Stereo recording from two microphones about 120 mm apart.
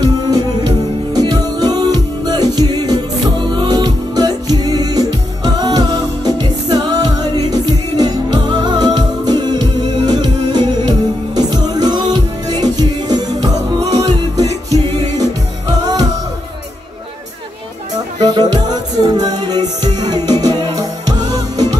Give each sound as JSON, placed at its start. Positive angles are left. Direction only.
{"t": 0.0, "sound": "music", "side_deg": -35}
{"t": 18.5, "sound": "music", "side_deg": -35}